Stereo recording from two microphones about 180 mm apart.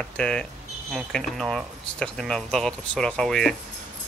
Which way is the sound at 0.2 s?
5° left (ahead or behind).